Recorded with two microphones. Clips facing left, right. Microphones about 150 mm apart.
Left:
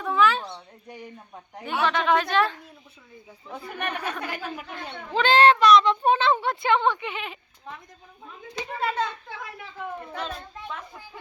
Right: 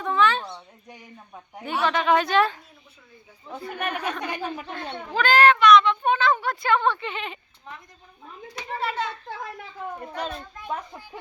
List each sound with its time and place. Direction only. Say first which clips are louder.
0.0 s a sound: even; 5° left (ahead or behind)
0.5 s speech: left 2 dB; 5° right (ahead or behind)
3.7 s speech: right 2 dB; 5° right (ahead or behind)
4.2 s speech: right 3 dB; 20° right (ahead or behind)
5.1 s a child's voice: left 1 dB; 25° left (ahead or behind); by 7.3 s 10° left (ahead or behind)
8.4 s a child's voice: left 1 dB; 25° left (ahead or behind)
10.2 s a child's voice: right 2 dB; 40° right (ahead or behind)